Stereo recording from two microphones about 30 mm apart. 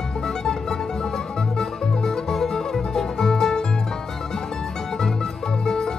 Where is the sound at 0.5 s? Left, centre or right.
Centre.